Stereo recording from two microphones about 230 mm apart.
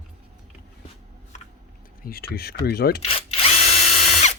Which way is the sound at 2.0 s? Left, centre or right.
Left.